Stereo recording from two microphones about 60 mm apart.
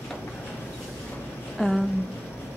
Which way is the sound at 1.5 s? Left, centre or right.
Centre.